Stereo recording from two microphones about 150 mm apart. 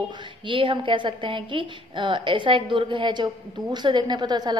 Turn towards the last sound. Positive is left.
turn(degrees=-30)  # may be behind; listen again after turning